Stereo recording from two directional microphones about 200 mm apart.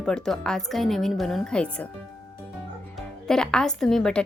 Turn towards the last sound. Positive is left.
turn(degrees=5)  # may be behind; listen again after turning